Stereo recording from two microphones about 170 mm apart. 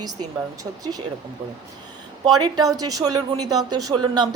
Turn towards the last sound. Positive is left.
turn(degrees=-25)  # may be behind; listen again after turning